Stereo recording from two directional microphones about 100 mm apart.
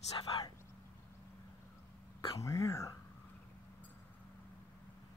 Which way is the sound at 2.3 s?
30° left (ahead or behind).